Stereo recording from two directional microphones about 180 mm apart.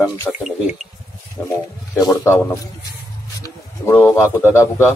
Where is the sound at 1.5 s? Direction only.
20° left (ahead or behind).